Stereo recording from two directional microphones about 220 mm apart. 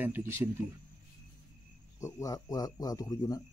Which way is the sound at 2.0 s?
15° left (ahead or behind).